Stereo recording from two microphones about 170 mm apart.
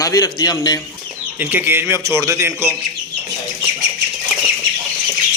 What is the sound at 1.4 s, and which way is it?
A man's voice, 10° right (ahead or behind).